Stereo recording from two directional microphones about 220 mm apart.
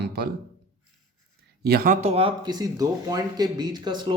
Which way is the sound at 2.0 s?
25° right (ahead or behind).